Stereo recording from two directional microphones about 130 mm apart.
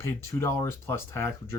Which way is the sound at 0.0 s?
20° left (ahead or behind).